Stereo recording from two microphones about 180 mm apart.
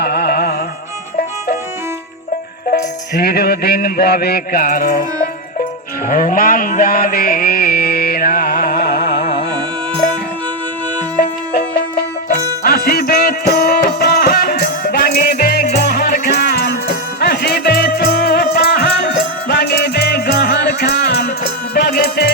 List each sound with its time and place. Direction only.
0.0 s carnatic music: 60° left (ahead or behind)
3.2 s mantra: 60° left (ahead or behind)
6.1 s mantra: 50° left (ahead or behind); by 9.2 s 65° left (ahead or behind)
11.2 s music: 60° left (ahead or behind)